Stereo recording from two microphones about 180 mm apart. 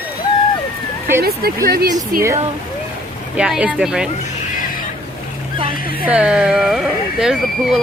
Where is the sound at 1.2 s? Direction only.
60° right (ahead or behind).